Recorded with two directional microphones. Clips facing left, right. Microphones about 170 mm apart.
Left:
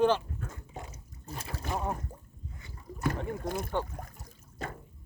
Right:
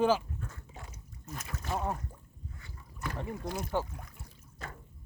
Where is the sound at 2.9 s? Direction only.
45° left (ahead or behind).